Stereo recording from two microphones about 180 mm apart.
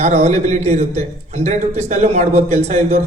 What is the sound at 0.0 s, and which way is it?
A man's voice, 35° right (ahead or behind).